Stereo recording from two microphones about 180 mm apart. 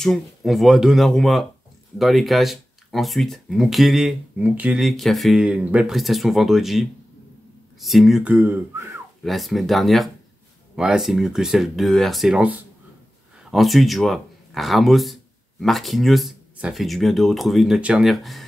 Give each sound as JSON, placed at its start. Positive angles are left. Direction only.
{"t": 0.0, "sound": "speech", "side_deg": 0}
{"t": 9.2, "sound": "speech", "side_deg": 0}